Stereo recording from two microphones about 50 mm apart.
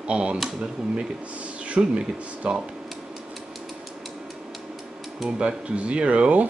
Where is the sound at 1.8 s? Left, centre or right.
Right.